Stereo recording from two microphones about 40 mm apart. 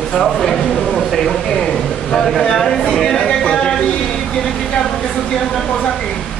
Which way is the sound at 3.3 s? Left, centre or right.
Centre.